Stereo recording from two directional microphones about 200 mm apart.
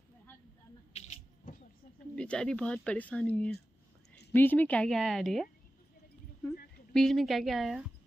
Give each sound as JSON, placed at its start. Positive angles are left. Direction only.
{"t": 0.9, "sound": "a sound", "side_deg": 40}
{"t": 2.1, "sound": "speech", "side_deg": 5}
{"t": 6.9, "sound": "speech", "side_deg": 0}